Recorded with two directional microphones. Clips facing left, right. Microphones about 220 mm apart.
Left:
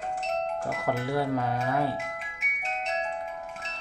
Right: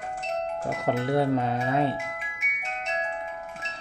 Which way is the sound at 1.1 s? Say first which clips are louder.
Right 5 dB; 25° right (ahead or behind).